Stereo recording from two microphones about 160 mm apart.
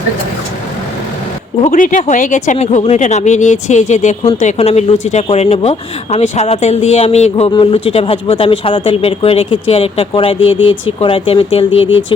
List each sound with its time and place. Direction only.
1.7 s speech: 55° left (ahead or behind); by 12.0 s 35° left (ahead or behind)